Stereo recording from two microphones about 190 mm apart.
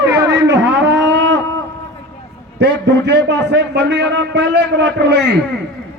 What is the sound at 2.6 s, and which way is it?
A man's voice, 60° right (ahead or behind).